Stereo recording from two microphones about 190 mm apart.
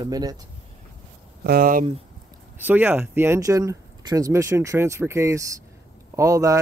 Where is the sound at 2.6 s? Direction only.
10° right (ahead or behind).